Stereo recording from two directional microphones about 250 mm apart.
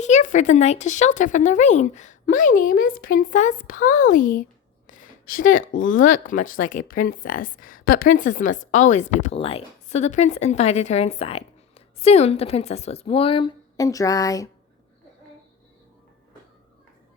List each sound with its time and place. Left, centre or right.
0.0 s speech: left
4.9 s a sound: left
5.3 s a woman's voice: left; by 14.5 s centre